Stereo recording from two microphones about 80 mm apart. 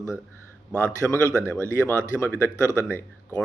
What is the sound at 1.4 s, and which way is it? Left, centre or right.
Speech, right.